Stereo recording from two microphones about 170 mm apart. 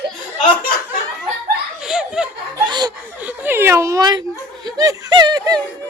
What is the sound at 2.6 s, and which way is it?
Laughter, 25° right (ahead or behind).